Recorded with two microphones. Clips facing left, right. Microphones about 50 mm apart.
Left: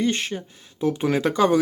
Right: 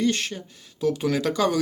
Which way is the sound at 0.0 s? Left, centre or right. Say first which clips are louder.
Left 1 dB; centre.